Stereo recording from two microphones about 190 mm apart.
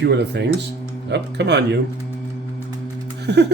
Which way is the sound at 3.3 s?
60° right (ahead or behind).